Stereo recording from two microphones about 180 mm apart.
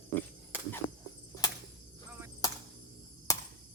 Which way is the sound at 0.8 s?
45° left (ahead or behind).